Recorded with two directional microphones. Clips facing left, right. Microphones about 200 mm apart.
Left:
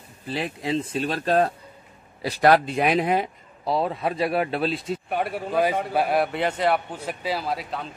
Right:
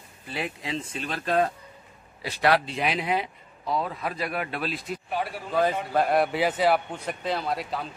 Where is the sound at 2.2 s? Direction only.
45° left (ahead or behind).